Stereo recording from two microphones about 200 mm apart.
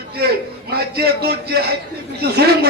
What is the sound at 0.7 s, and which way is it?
A man's voice, 50° right (ahead or behind).